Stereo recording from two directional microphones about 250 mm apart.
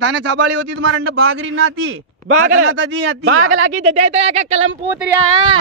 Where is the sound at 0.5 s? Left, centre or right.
Right.